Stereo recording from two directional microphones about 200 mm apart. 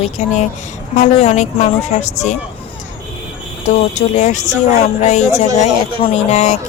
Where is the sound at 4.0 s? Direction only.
35° left (ahead or behind).